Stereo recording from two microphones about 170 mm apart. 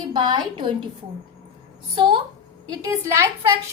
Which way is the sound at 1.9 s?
30° right (ahead or behind).